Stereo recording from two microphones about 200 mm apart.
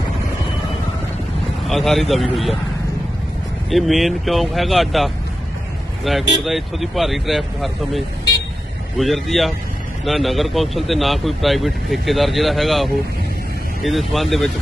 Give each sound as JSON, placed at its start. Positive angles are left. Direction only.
{"t": 1.6, "sound": "speech", "side_deg": 0}
{"t": 3.7, "sound": "speech", "side_deg": 0}